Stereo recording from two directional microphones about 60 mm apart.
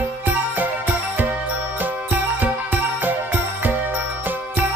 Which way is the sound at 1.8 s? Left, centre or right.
Right.